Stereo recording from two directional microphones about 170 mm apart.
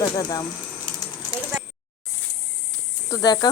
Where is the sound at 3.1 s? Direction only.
20° left (ahead or behind).